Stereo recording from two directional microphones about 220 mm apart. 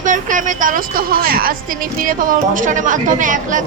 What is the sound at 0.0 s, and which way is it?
A woman's voice, 35° right (ahead or behind).